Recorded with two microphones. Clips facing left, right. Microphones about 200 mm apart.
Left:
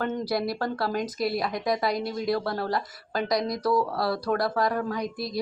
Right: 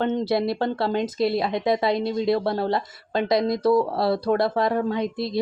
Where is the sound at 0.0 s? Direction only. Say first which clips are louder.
Right 5 dB; 25° right (ahead or behind).